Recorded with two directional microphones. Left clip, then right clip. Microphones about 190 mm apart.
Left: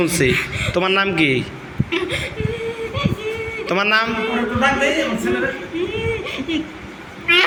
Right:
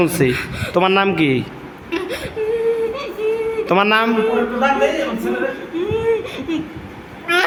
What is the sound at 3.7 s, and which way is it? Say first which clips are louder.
Speech: right 2 dB; 30° right (ahead or behind).